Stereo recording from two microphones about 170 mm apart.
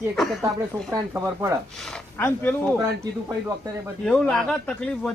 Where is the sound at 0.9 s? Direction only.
20° right (ahead or behind).